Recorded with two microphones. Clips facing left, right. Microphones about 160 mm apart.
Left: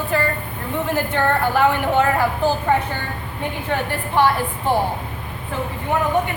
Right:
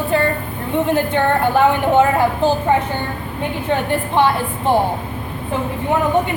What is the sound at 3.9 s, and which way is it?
Speech, 20° right (ahead or behind).